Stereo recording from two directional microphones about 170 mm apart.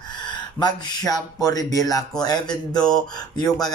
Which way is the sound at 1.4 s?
20° left (ahead or behind).